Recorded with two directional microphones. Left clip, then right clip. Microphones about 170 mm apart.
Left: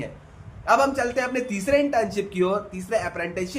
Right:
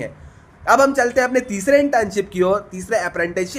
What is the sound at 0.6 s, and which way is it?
A man's voice, 50° right (ahead or behind).